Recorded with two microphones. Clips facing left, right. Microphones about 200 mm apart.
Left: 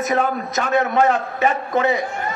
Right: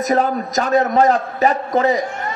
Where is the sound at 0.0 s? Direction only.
35° right (ahead or behind).